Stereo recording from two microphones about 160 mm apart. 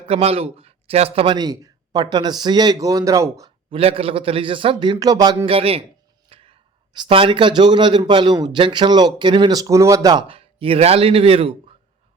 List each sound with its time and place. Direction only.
0.0 s speech: 40° right (ahead or behind); by 3.5 s 20° right (ahead or behind)
3.7 s a man's voice: 35° right (ahead or behind)